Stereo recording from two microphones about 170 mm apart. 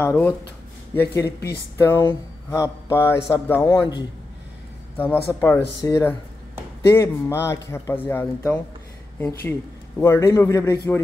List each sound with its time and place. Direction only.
0.0 s speech: 10° left (ahead or behind)
3.6 s a man's voice: 25° left (ahead or behind)
4.9 s a man's voice: 10° left (ahead or behind)